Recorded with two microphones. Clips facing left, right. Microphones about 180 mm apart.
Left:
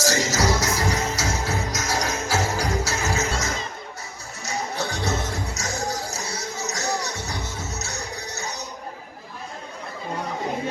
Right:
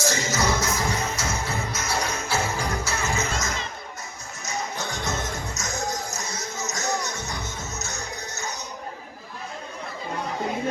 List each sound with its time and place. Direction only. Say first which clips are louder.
0.0 s music: left 2 dB; 40° left (ahead or behind)